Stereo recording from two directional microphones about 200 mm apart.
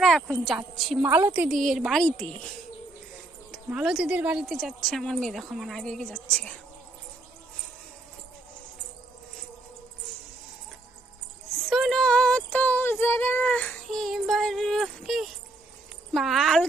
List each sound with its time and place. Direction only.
0.0 s a sound: centre (ahead or behind)
0.4 s a woman's voice: centre (ahead or behind)
1.0 s a woman's voice: 10° right (ahead or behind); by 2.3 s 5° left (ahead or behind)
3.5 s a woman's voice: 5° right (ahead or behind)
11.7 s a woman's voice: centre (ahead or behind)